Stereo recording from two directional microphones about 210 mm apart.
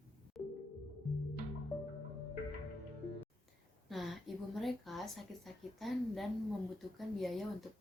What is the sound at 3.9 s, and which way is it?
Speech, centre (ahead or behind).